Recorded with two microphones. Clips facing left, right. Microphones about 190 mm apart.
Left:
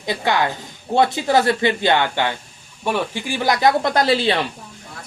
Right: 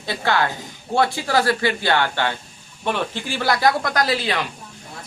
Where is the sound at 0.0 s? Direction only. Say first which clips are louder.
Left 1 dB; 15° left (ahead or behind).